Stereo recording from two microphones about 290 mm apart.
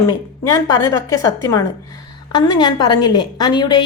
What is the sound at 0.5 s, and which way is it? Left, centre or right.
A woman's voice, centre.